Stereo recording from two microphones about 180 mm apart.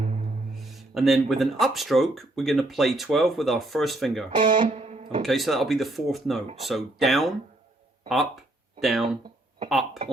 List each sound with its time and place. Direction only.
0.0 s music: 35° right (ahead or behind)
0.5 s speech: centre (ahead or behind)
4.3 s speech: 25° right (ahead or behind)
5.2 s speech: centre (ahead or behind)
8.8 s speech: centre (ahead or behind)